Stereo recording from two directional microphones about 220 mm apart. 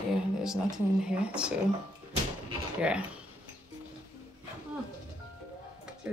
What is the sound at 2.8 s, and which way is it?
Speech, 5° right (ahead or behind).